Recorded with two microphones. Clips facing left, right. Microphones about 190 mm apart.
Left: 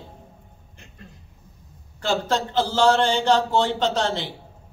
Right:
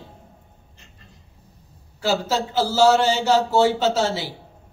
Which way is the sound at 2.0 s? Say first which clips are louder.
Right 1 dB; 5° right (ahead or behind).